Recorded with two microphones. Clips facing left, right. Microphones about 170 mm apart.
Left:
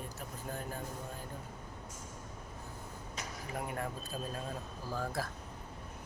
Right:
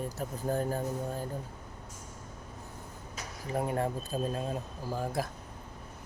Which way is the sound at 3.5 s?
30° right (ahead or behind).